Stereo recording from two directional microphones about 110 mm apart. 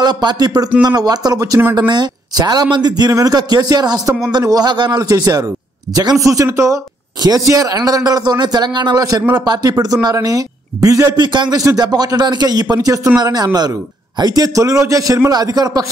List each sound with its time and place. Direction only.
0.0 s a man's voice: 40° right (ahead or behind)